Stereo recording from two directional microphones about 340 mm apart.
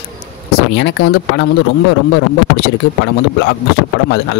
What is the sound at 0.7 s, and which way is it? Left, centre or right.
Speech, left.